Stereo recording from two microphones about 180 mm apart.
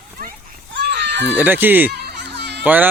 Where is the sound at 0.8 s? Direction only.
70° right (ahead or behind).